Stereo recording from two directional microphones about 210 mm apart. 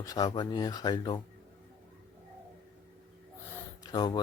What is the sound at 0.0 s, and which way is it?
Speech, 20° left (ahead or behind).